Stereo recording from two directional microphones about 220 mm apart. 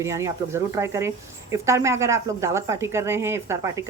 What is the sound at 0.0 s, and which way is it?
Speech, 10° right (ahead or behind).